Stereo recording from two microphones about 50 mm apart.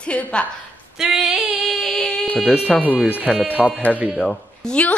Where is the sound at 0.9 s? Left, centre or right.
Centre.